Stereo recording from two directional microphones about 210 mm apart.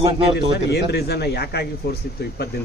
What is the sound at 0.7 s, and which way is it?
Speech, 50° left (ahead or behind).